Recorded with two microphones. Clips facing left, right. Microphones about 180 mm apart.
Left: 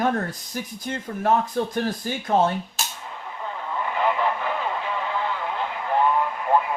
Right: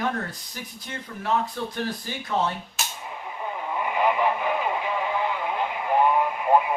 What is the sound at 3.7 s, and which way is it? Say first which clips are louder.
Radio: even; 15° right (ahead or behind).